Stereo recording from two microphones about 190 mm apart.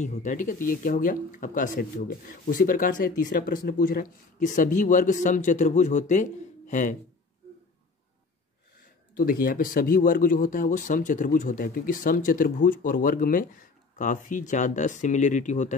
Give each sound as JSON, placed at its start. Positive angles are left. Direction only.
{"t": 0.0, "sound": "speech", "side_deg": 40}
{"t": 9.1, "sound": "speech", "side_deg": 50}